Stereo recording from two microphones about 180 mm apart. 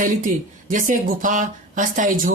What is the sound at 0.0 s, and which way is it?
Speech, 45° right (ahead or behind).